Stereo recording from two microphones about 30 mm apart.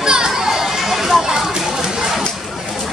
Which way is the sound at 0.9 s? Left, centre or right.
Centre.